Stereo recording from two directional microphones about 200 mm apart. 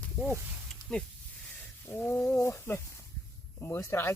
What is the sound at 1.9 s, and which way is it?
Speech, 10° left (ahead or behind).